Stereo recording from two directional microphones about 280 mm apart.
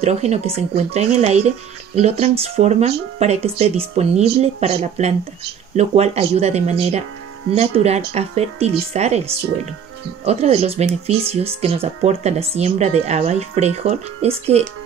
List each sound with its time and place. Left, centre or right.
0.0 s speech: right